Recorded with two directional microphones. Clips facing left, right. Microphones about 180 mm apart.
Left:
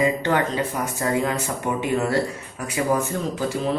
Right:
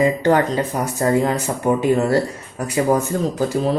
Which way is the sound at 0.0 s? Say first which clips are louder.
Right 5 dB; 40° right (ahead or behind).